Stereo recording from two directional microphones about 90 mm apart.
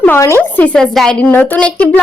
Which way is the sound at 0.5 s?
15° left (ahead or behind).